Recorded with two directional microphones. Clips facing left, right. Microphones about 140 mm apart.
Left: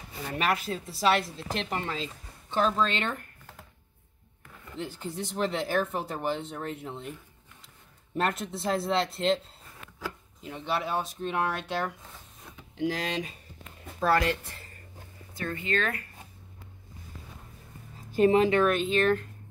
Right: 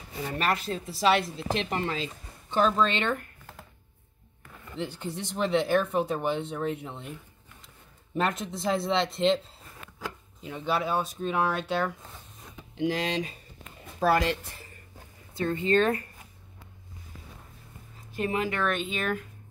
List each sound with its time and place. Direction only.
0.4 s speech: 5° left (ahead or behind)
4.8 s speech: 5° left (ahead or behind)
8.1 s speech: centre (ahead or behind)
10.5 s speech: 5° right (ahead or behind)
13.9 s speech: 15° right (ahead or behind)
18.1 s a woman's voice: 30° left (ahead or behind)
18.7 s speech: centre (ahead or behind)